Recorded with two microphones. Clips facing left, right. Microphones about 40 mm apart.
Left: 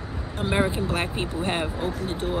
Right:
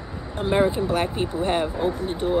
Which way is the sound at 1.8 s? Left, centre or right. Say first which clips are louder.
Right 4 dB; right.